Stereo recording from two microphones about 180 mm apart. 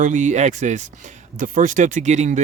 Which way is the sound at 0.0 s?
45° right (ahead or behind).